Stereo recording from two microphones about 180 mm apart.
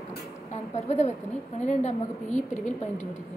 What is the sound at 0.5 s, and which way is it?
A woman's voice, 40° left (ahead or behind).